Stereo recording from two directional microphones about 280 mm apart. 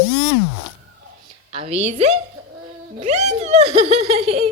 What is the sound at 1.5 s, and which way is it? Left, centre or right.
Speech, right.